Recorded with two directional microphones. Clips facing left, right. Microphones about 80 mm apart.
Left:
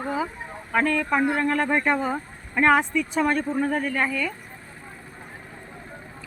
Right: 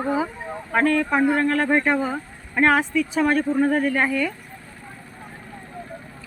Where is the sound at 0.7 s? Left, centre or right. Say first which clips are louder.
Right 3 dB; centre.